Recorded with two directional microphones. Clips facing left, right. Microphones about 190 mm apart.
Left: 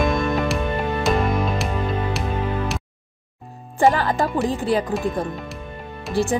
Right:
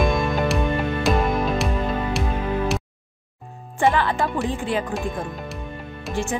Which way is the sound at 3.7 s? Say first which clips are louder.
Left 2 dB; 40° left (ahead or behind).